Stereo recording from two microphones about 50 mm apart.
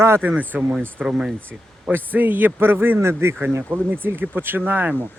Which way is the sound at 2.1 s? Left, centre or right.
Right.